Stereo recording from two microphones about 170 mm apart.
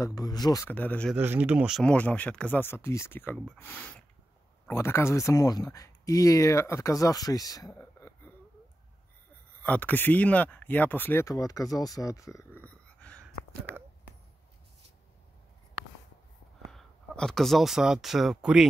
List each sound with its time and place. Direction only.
0.0 s speech: 20° left (ahead or behind)
0.7 s speech: 10° left (ahead or behind)
1.1 s speech: 10° right (ahead or behind)
1.8 s speech: 10° left (ahead or behind)
9.6 s speech: 10° left (ahead or behind)
16.7 s speech: 5° left (ahead or behind)